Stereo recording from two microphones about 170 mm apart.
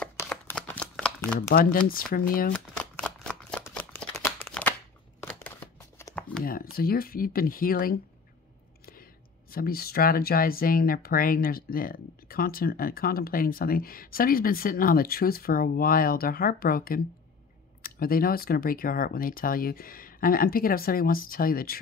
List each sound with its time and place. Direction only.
0.0 s shuffling cards: 10° left (ahead or behind)
1.5 s speech: 60° left (ahead or behind)
2.5 s shuffling cards: 5° left (ahead or behind)
3.6 s a sound: 10° left (ahead or behind)
5.2 s shuffling cards: 10° left (ahead or behind)
6.4 s speech: 60° left (ahead or behind)